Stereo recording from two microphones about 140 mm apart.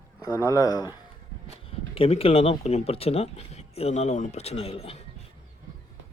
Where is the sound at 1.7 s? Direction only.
45° left (ahead or behind).